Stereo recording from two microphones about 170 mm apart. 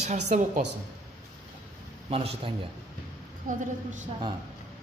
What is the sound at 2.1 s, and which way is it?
Speech, 35° right (ahead or behind).